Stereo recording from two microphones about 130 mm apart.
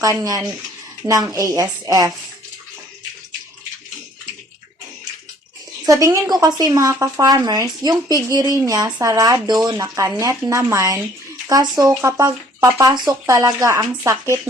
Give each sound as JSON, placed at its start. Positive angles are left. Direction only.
{"t": 0.0, "sound": "speech", "side_deg": -25}
{"t": 5.8, "sound": "speech", "side_deg": -25}